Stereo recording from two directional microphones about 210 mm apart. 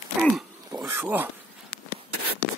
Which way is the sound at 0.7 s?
15° right (ahead or behind).